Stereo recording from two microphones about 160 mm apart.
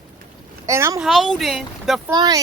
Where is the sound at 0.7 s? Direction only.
15° right (ahead or behind).